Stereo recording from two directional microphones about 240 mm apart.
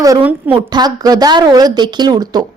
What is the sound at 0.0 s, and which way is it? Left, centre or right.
A woman's voice, centre.